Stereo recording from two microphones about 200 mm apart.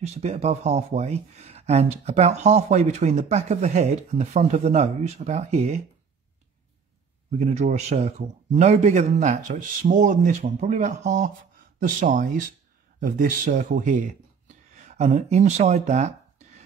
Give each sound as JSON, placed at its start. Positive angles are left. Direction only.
{"t": 0.0, "sound": "speech", "side_deg": -35}
{"t": 7.2, "sound": "speech", "side_deg": -35}